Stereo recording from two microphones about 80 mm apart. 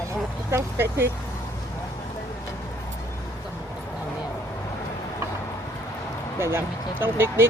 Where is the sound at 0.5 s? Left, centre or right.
Right.